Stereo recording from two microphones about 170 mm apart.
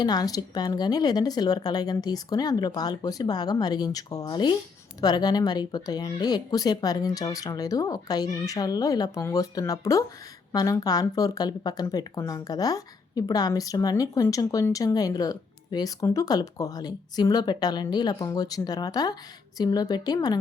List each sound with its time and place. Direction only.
0.0 s speech: 25° left (ahead or behind)